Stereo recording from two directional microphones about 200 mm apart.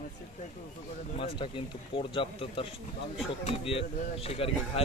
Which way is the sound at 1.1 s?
25° left (ahead or behind).